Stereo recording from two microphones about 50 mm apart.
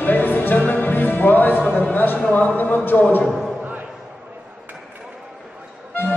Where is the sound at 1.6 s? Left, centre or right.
Left.